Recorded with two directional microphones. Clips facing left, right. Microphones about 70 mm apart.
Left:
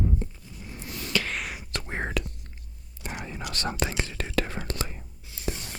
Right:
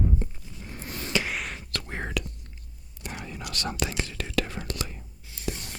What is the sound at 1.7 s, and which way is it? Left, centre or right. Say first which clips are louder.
Whispering: left 3 dB; left.